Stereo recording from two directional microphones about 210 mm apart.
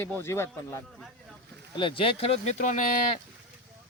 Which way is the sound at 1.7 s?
25° left (ahead or behind).